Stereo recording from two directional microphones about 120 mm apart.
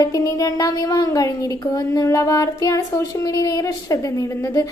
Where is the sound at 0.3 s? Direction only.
30° left (ahead or behind).